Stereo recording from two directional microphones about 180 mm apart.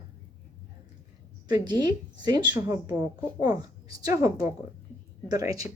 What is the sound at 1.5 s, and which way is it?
A woman's voice, 20° right (ahead or behind).